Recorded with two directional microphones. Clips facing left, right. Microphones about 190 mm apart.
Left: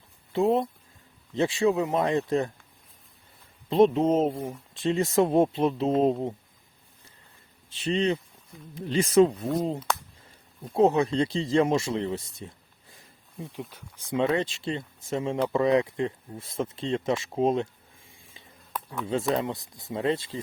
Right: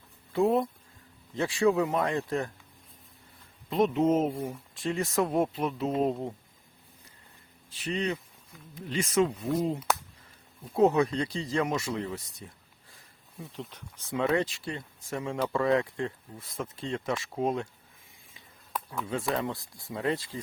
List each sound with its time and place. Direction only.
0.3 s speech: 20° left (ahead or behind)
3.7 s speech: 30° left (ahead or behind)
7.7 s speech: 25° left (ahead or behind)
9.5 s speech: 5° right (ahead or behind)
10.8 s speech: 25° left (ahead or behind)
13.5 s speech: 10° left (ahead or behind); by 17.7 s 25° left (ahead or behind)
19.3 s speech: 20° left (ahead or behind)